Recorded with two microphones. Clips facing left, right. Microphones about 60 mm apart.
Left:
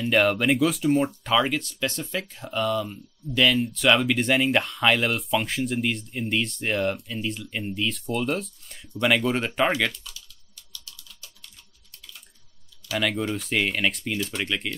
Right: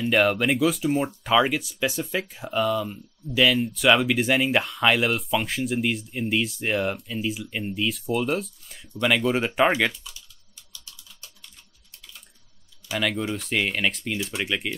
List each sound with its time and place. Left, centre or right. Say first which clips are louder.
0.0 s speech: even; centre
10.7 s typing: left 2 dB; centre
12.9 s speech: even; centre